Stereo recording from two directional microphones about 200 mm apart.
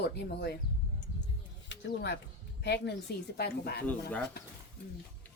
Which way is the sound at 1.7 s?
60° left (ahead or behind).